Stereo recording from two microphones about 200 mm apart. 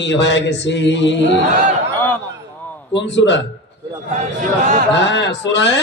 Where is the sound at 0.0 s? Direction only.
60° left (ahead or behind).